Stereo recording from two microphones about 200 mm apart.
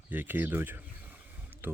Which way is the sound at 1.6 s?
10° right (ahead or behind).